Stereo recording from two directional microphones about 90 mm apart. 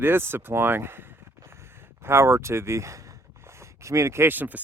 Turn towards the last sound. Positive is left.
turn(degrees=-20)  # may be behind; listen again after turning